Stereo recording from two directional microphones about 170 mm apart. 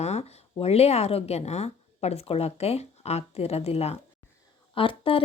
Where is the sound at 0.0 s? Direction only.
40° left (ahead or behind).